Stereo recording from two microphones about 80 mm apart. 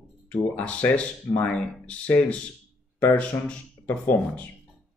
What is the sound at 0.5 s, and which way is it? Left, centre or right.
Speech, centre.